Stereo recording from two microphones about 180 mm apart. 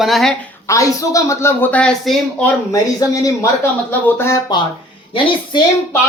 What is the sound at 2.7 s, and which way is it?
A man's voice, 20° left (ahead or behind).